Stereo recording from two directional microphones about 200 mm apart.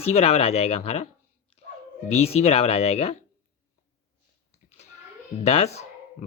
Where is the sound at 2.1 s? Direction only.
30° left (ahead or behind).